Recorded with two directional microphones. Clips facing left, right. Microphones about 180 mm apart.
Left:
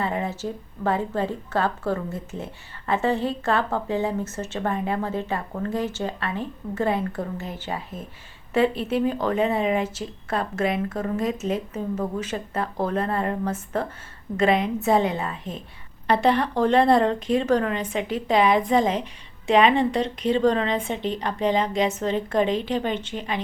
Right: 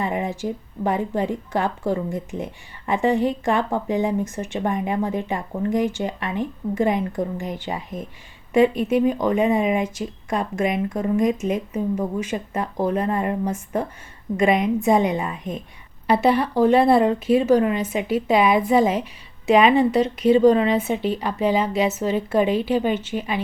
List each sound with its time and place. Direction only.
0.0 s speech: 15° right (ahead or behind)